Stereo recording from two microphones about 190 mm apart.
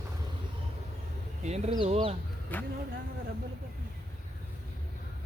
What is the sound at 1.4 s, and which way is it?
Speech, 35° right (ahead or behind).